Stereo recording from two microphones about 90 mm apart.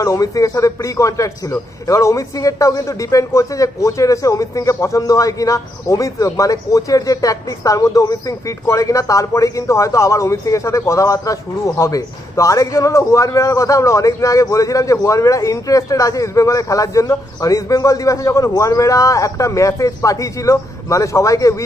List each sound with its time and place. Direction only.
0.0 s speech: 40° left (ahead or behind)